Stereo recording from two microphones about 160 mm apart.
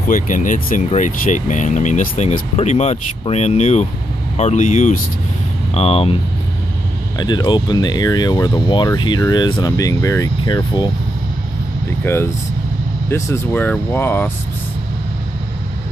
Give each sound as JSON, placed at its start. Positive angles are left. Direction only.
{"t": 0.1, "sound": "speech", "side_deg": 55}
{"t": 5.8, "sound": "speech", "side_deg": 40}
{"t": 7.2, "sound": "speech", "side_deg": 25}
{"t": 12.0, "sound": "speech", "side_deg": 15}